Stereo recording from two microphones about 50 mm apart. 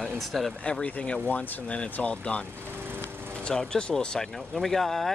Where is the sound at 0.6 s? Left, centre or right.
Left.